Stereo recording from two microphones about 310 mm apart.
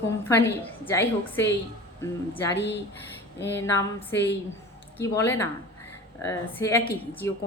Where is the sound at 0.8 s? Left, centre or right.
Centre.